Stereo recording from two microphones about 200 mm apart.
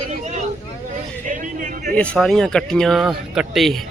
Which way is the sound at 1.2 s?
40° right (ahead or behind).